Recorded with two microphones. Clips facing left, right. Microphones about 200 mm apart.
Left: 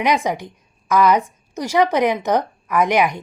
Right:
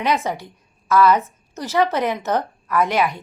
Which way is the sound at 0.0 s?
15° left (ahead or behind).